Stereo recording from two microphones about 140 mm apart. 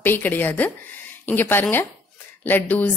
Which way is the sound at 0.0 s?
15° left (ahead or behind).